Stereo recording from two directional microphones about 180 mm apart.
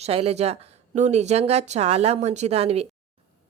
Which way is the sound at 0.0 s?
35° right (ahead or behind).